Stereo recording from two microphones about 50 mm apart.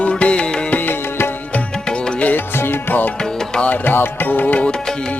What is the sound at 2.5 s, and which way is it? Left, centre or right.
Music, left.